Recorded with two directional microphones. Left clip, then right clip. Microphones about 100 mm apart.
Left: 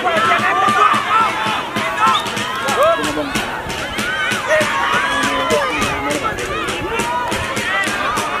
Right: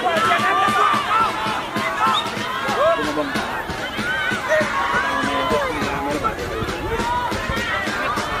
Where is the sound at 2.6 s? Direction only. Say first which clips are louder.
Left 4 dB; 20° left (ahead or behind).